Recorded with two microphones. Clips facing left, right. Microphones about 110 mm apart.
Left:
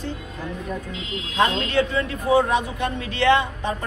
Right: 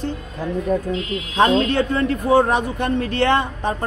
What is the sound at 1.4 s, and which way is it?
A man's voice, 45° right (ahead or behind).